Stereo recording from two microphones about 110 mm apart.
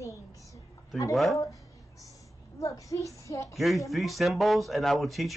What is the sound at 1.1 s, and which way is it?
Speech, centre (ahead or behind).